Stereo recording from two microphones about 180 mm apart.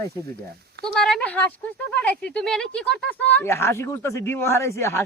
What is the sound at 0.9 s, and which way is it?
Speech, 5° left (ahead or behind).